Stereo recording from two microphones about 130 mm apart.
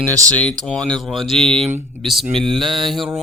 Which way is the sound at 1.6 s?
55° right (ahead or behind).